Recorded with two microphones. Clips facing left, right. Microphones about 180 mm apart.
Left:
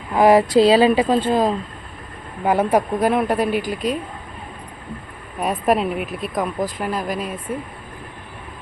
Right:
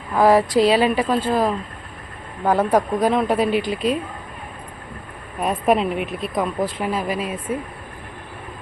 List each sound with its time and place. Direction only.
0.1 s a woman's voice: 20° left (ahead or behind)
2.4 s speech: 10° left (ahead or behind)
5.4 s speech: centre (ahead or behind)